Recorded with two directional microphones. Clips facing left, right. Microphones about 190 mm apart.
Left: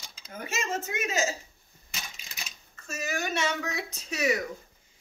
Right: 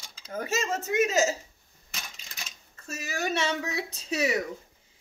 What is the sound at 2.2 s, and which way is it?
Typewriter, 10° left (ahead or behind).